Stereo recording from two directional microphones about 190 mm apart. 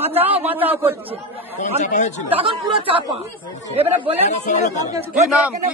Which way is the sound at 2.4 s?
30° right (ahead or behind).